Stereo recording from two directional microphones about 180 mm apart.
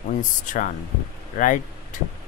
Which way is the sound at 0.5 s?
45° left (ahead or behind).